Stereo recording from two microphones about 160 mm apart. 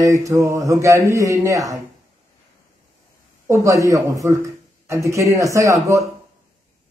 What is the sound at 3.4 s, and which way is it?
A man's voice, 20° right (ahead or behind).